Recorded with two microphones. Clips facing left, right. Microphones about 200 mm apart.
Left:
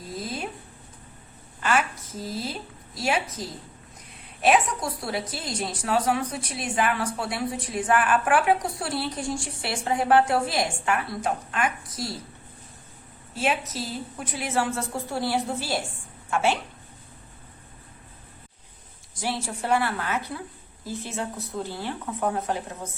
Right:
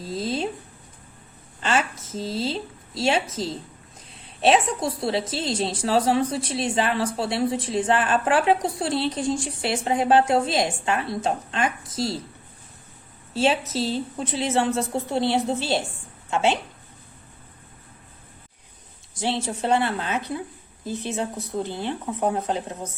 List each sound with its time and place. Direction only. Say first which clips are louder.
0.0 s a sound: right 6 dB; 25° right (ahead or behind)
1.6 s a woman's voice: right 1 dB; 25° right (ahead or behind)
13.3 s a woman's voice: right 5 dB; 30° right (ahead or behind)
19.1 s a woman's voice: right 4 dB; 25° right (ahead or behind)